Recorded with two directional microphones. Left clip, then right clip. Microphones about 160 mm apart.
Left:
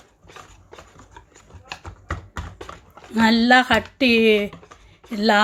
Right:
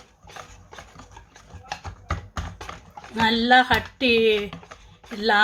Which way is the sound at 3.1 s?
50° left (ahead or behind).